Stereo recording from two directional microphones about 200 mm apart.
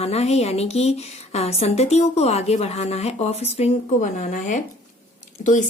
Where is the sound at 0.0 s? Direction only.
30° left (ahead or behind).